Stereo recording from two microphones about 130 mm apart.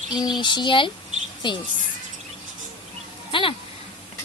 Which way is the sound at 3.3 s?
40° left (ahead or behind).